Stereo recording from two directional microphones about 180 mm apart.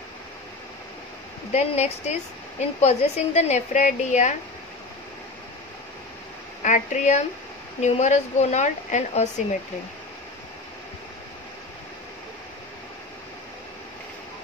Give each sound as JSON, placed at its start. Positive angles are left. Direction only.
{"t": 1.5, "sound": "a woman's voice", "side_deg": 40}
{"t": 6.6, "sound": "a woman's voice", "side_deg": 45}